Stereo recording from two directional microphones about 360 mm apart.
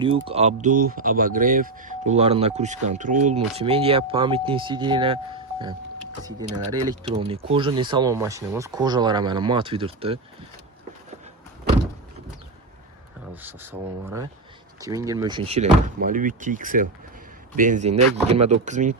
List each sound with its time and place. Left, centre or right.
0.0 s speech: centre
7.1 s speech: centre
13.3 s speech: centre